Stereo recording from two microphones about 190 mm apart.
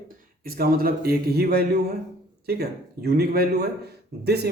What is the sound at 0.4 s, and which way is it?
A man's voice, 50° right (ahead or behind).